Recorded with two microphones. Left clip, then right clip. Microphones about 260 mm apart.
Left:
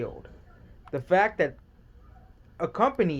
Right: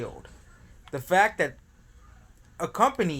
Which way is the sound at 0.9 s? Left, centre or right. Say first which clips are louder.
Right 1 dB; centre.